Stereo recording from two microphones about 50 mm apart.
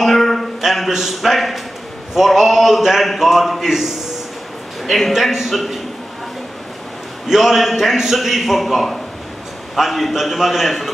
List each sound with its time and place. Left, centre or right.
0.0 s a sound: centre
2.1 s a man's voice: centre
7.2 s a man's voice: centre